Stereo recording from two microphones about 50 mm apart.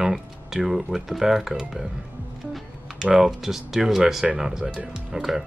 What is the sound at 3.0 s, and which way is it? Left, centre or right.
Speech, centre.